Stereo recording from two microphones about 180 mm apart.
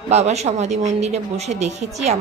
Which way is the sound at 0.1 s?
40° right (ahead or behind).